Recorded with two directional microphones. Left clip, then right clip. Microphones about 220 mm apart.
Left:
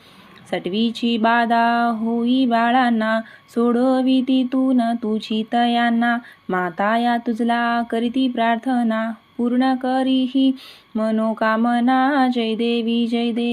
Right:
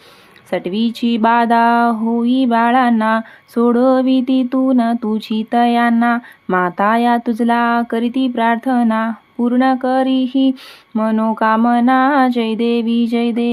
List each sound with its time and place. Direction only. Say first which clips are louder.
0.5 s speech: right 3 dB; 20° right (ahead or behind)